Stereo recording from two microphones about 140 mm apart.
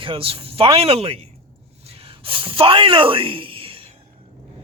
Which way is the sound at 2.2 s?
40° right (ahead or behind).